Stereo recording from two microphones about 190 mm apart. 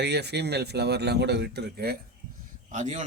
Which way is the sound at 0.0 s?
60° right (ahead or behind).